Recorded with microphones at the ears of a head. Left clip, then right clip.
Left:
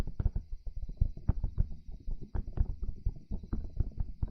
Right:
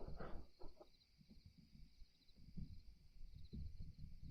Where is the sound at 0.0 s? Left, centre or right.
Left.